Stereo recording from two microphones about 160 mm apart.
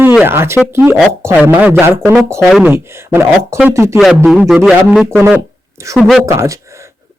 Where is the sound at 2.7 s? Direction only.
15° right (ahead or behind).